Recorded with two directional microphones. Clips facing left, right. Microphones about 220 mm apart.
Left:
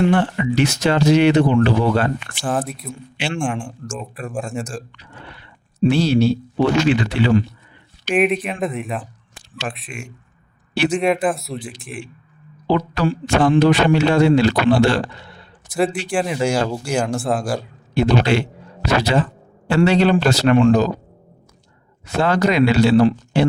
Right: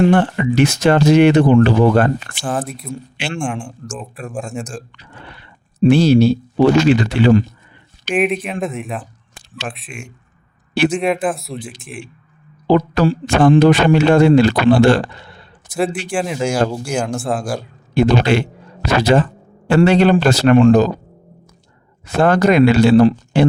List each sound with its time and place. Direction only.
0.0 s a man's voice: 50° right (ahead or behind)
2.4 s speech: centre (ahead or behind)
5.8 s a man's voice: 45° right (ahead or behind)
8.0 s speech: centre (ahead or behind)
12.6 s a man's voice: 45° right (ahead or behind)
15.7 s speech: centre (ahead or behind)
17.9 s a man's voice: 50° right (ahead or behind)
22.0 s a man's voice: 50° right (ahead or behind)